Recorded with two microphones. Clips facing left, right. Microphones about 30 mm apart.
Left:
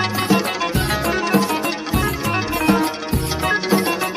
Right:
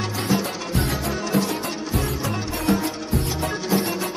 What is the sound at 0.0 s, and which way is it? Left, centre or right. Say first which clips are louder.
Music: left 5 dB; left.